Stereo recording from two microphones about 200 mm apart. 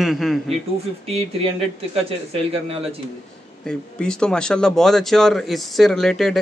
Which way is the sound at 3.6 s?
5° left (ahead or behind).